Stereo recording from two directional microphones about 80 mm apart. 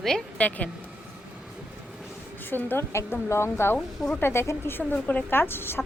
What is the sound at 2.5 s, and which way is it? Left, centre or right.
A woman's voice, left.